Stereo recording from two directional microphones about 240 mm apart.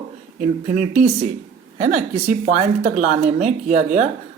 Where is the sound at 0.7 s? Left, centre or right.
Right.